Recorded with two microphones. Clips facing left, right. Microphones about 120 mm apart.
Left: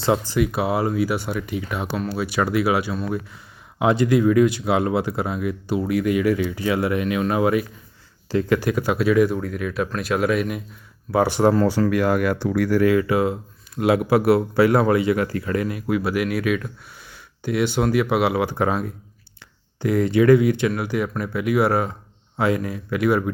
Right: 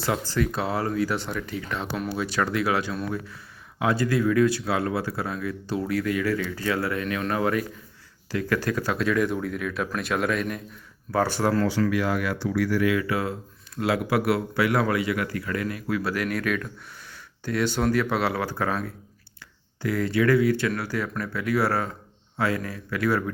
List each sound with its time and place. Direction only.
0.0 s speech: 20° left (ahead or behind)
1.9 s speech: centre (ahead or behind)
2.2 s speech: 10° left (ahead or behind)
8.3 s speech: 30° left (ahead or behind)
8.5 s speech: 15° left (ahead or behind)
11.7 s speech: 45° left (ahead or behind)
13.1 s speech: 20° left (ahead or behind)